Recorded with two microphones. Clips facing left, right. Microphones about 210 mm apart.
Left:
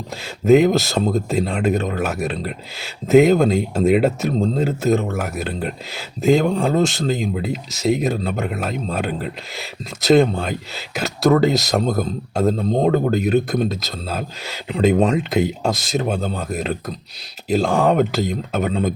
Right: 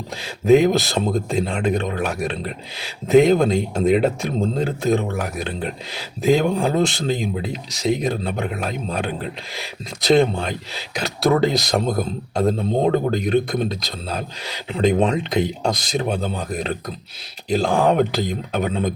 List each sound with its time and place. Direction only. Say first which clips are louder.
0.2 s speech: left 1 dB; centre (ahead or behind)